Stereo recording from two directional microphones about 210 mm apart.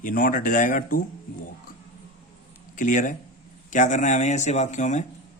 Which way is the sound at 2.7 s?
40° left (ahead or behind).